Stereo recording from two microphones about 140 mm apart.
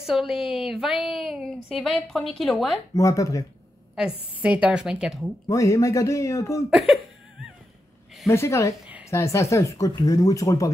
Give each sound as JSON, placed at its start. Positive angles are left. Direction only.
{"t": 0.0, "sound": "a woman's voice", "side_deg": 0}
{"t": 2.9, "sound": "speech", "side_deg": 20}
{"t": 4.4, "sound": "speech", "side_deg": -10}
{"t": 5.5, "sound": "speech", "side_deg": 25}
{"t": 6.7, "sound": "a sound", "side_deg": 0}
{"t": 8.3, "sound": "speech", "side_deg": 20}